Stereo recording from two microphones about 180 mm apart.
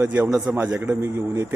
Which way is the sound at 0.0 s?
10° right (ahead or behind).